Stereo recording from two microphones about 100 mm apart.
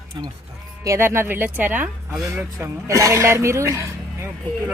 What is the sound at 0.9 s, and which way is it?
A woman's voice, 25° right (ahead or behind).